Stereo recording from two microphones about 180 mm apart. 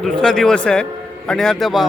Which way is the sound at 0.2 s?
5° left (ahead or behind).